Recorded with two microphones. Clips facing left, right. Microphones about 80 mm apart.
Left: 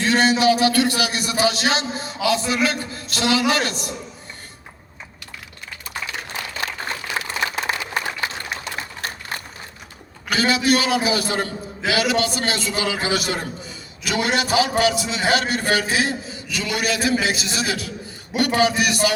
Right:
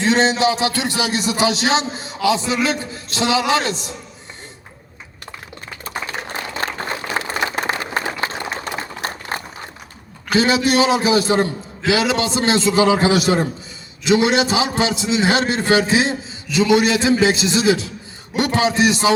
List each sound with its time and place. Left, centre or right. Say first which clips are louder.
0.0 s a man's voice: right 1 dB; right
7.2 s a sound: right 2 dB; right
10.2 s a man's voice: right 3 dB; right